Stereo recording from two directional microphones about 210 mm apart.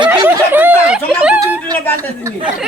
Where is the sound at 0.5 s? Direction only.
5° right (ahead or behind).